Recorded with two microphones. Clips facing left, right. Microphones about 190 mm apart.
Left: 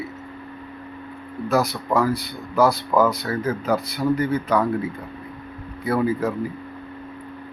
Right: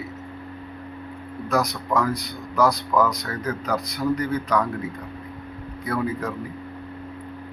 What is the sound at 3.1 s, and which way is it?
Speech, 5° left (ahead or behind).